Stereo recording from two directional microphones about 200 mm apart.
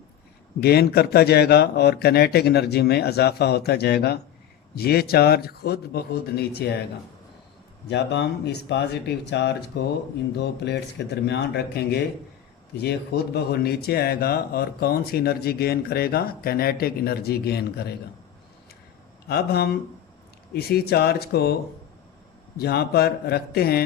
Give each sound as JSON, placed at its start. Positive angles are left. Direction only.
{"t": 0.6, "sound": "speech", "side_deg": 50}
{"t": 7.9, "sound": "speech", "side_deg": 60}
{"t": 19.3, "sound": "speech", "side_deg": 50}
{"t": 22.5, "sound": "speech", "side_deg": 50}